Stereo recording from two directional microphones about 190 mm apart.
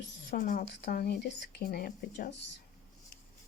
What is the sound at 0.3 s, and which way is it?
Speech, 45° left (ahead or behind).